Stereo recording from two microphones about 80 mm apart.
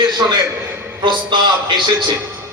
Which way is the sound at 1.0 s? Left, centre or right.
Right.